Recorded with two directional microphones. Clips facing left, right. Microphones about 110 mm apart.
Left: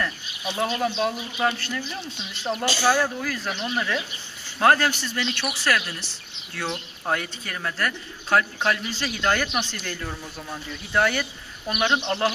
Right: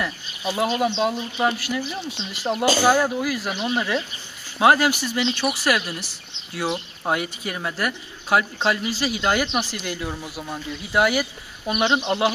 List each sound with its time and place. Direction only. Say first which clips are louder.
0.7 s speech: right 3 dB; 25° right (ahead or behind)